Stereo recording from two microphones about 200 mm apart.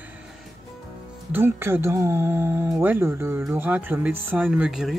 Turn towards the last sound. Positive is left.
turn(degrees=0)  # may be behind; listen again after turning